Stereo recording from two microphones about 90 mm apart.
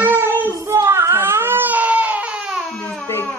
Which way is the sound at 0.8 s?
25° right (ahead or behind).